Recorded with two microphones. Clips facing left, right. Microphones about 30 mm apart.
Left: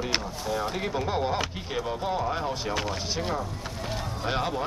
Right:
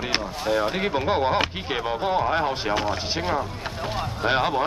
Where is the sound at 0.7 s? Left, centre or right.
Right.